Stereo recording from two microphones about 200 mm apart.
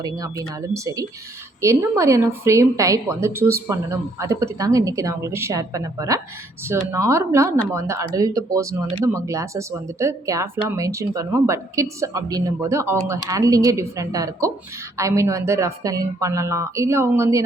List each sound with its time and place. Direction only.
0.0 s speech: 15° right (ahead or behind)